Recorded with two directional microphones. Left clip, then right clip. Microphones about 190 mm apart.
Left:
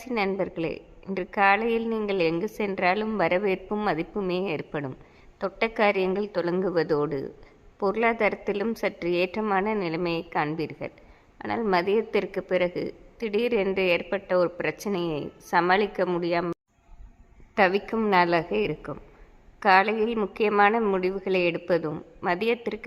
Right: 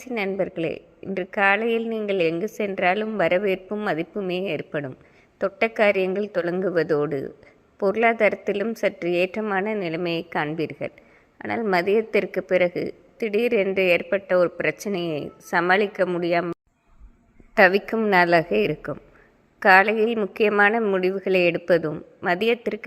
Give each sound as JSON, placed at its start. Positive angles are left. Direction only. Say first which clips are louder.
{"t": 0.0, "sound": "a woman's voice", "louder": "right 1 dB", "side_deg": -5}
{"t": 17.5, "sound": "a woman's voice", "louder": "right 5 dB", "side_deg": -20}